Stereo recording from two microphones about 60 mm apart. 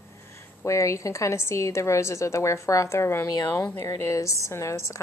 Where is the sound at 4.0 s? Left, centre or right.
Left.